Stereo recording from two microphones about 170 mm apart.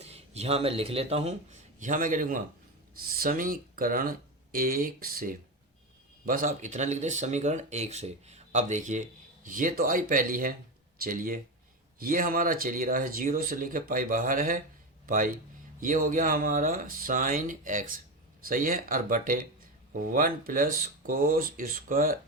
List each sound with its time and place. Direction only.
0.0 s a man's voice: 40° right (ahead or behind); by 22.2 s 55° right (ahead or behind)